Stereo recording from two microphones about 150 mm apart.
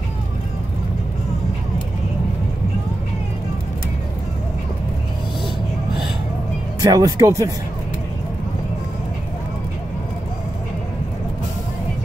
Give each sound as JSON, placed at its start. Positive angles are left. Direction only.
{"t": 6.8, "sound": "speech", "side_deg": -25}